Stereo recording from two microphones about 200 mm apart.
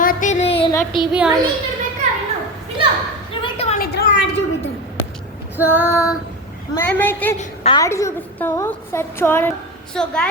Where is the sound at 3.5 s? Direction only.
30° left (ahead or behind).